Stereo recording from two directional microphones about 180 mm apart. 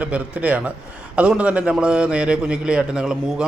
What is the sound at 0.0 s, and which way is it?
A man's voice, 10° right (ahead or behind).